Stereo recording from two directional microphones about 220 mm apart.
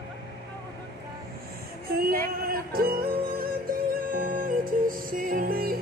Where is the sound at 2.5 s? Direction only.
40° right (ahead or behind).